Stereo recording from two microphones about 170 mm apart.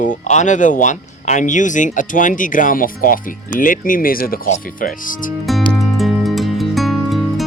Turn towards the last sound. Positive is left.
turn(degrees=0)  # may be behind; listen again after turning